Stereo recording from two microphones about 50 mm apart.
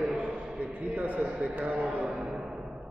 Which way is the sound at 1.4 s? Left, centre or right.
Right.